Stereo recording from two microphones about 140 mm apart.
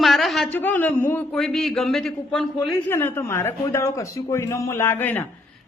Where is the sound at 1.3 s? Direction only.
5° left (ahead or behind).